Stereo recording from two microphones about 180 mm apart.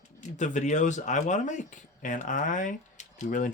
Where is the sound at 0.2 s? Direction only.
40° left (ahead or behind).